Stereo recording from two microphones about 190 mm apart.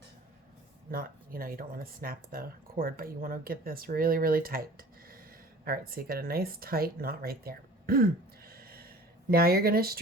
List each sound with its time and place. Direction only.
0.9 s speech: 50° right (ahead or behind)
8.4 s gasp: 50° right (ahead or behind)
9.3 s speech: 50° right (ahead or behind)